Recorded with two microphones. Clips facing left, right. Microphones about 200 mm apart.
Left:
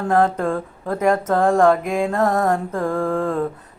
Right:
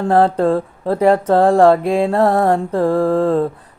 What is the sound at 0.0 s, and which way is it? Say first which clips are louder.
Mantra: right 5 dB; 30° right (ahead or behind).